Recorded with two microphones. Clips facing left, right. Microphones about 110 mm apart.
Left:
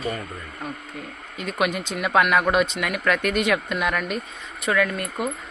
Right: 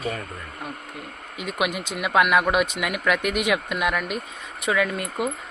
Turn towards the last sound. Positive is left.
turn(degrees=-20)  # may be behind; listen again after turning